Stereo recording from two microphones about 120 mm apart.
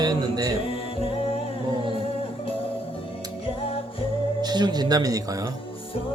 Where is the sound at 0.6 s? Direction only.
50° left (ahead or behind).